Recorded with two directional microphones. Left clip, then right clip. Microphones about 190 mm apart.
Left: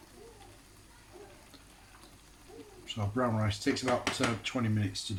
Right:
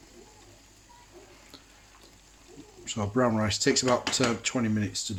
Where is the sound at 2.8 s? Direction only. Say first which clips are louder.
Right 6 dB; 45° right (ahead or behind).